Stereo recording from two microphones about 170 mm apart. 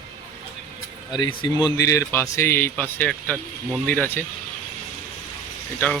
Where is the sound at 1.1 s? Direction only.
25° left (ahead or behind).